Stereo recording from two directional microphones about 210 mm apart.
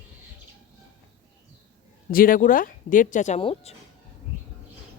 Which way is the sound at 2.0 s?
40° left (ahead or behind).